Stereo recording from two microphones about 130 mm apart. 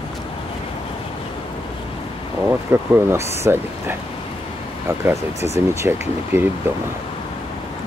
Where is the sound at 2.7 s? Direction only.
15° right (ahead or behind).